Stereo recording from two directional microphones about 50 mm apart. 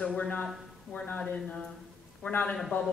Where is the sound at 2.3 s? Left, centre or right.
Left.